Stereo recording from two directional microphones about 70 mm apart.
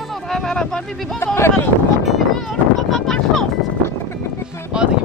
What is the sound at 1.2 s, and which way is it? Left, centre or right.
Speech, left.